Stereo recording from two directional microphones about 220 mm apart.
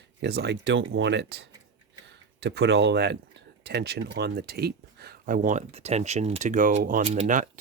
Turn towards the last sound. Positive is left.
turn(degrees=-35)  # may be behind; listen again after turning